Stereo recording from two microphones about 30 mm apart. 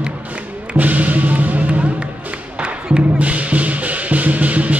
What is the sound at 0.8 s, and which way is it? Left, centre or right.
Music, right.